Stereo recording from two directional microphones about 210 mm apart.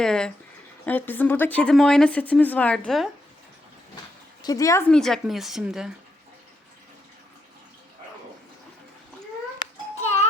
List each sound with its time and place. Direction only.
0.0 s speech: 5° left (ahead or behind)
4.4 s speech: 15° left (ahead or behind)
4.9 s speech: centre (ahead or behind)